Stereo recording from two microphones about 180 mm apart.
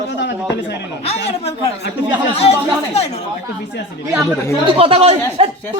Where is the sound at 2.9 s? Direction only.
35° left (ahead or behind).